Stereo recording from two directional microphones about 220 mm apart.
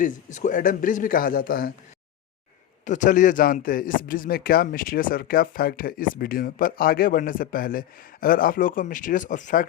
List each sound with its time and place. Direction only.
0.0 s speech: 35° left (ahead or behind)
2.8 s speech: 35° left (ahead or behind)